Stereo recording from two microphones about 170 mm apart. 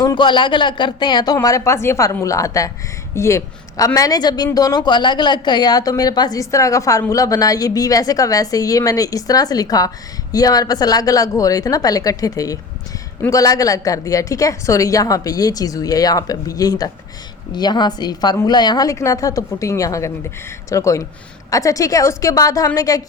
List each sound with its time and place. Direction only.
0.0 s a woman's voice: 25° left (ahead or behind)